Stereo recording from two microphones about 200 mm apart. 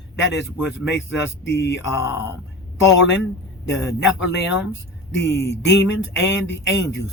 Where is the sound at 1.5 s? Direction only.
60° left (ahead or behind).